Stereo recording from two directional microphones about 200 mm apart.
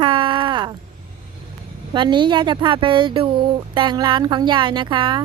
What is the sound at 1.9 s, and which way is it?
Speech, 25° right (ahead or behind).